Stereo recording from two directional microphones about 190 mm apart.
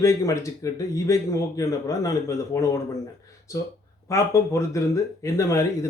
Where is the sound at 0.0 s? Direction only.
15° left (ahead or behind).